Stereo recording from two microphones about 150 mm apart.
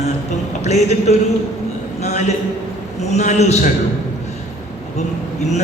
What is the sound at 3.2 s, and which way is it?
Speech, 50° left (ahead or behind).